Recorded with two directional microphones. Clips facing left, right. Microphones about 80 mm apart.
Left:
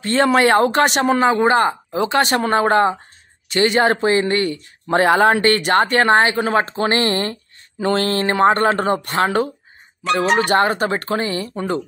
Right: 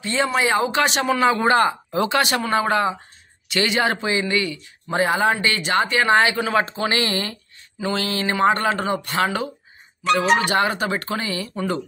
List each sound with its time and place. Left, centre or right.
0.0 s speech: left
2.0 s speech: left
6.1 s speech: left